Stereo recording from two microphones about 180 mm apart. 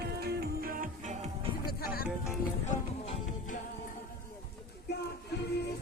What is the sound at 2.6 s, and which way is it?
Music, 45° left (ahead or behind).